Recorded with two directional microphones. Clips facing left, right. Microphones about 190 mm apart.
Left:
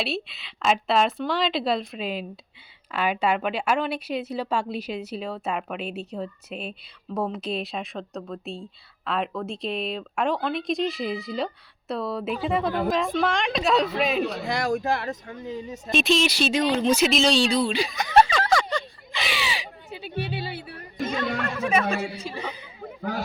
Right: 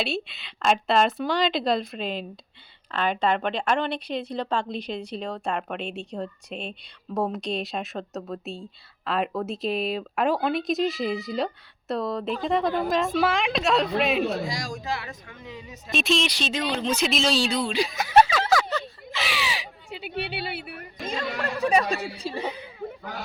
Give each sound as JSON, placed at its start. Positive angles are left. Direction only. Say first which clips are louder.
{"t": 0.0, "sound": "speech", "louder": "right 1 dB", "side_deg": 0}
{"t": 14.4, "sound": "speech", "louder": "left 7 dB", "side_deg": 60}
{"t": 15.9, "sound": "speech", "louder": "left 3 dB", "side_deg": 0}
{"t": 17.1, "sound": "a sound", "louder": "left 3 dB", "side_deg": 0}
{"t": 21.0, "sound": "speech", "louder": "left 3 dB", "side_deg": -30}